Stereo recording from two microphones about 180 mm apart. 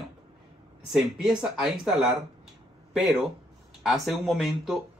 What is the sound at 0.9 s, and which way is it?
Speech, 5° right (ahead or behind).